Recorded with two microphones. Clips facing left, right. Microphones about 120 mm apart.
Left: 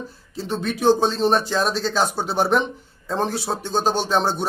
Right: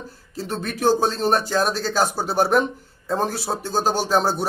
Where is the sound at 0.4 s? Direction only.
Centre (ahead or behind).